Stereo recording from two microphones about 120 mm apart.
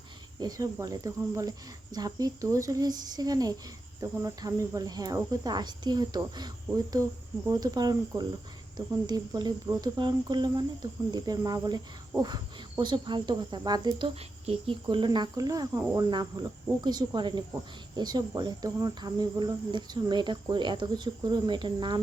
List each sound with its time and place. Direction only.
0.3 s speech: 30° right (ahead or behind)
14.2 s speech: 55° right (ahead or behind)
14.8 s speech: 40° right (ahead or behind)